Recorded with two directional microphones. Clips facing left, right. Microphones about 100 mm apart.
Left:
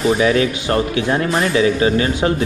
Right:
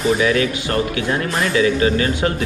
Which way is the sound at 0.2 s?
30° left (ahead or behind).